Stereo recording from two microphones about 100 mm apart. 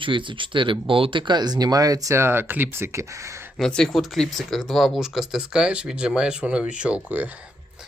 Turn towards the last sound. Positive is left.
turn(degrees=-15)  # may be behind; listen again after turning